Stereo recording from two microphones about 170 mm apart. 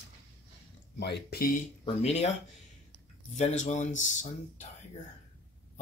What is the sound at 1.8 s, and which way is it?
Speech, 40° left (ahead or behind).